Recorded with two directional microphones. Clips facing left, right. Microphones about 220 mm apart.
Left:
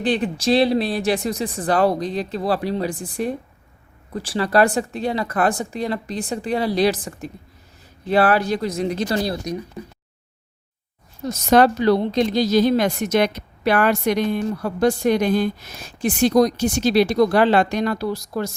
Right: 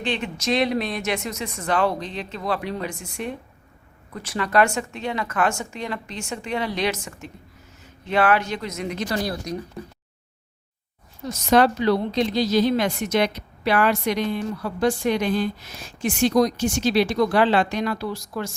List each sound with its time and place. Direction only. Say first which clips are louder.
0.0 s speech: left 6 dB; 35° left (ahead or behind)
11.2 s a woman's voice: left 3 dB; 45° left (ahead or behind)